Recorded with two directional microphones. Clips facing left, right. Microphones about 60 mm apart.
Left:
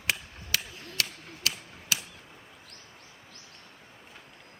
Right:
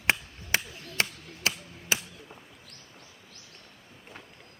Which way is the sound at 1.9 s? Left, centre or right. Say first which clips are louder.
Right 3 dB; right.